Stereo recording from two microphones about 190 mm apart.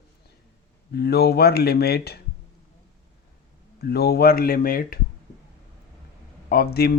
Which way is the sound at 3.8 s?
55° left (ahead or behind).